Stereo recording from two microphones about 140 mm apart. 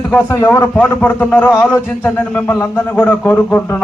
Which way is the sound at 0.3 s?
25° left (ahead or behind).